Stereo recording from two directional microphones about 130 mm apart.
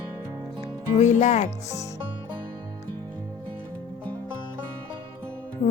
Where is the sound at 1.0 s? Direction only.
65° left (ahead or behind).